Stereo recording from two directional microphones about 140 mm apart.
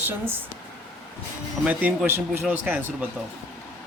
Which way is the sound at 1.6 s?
10° right (ahead or behind).